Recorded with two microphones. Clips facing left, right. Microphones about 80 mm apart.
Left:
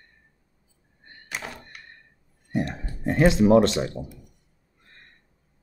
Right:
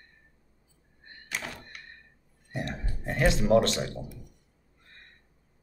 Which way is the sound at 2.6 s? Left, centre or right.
Left.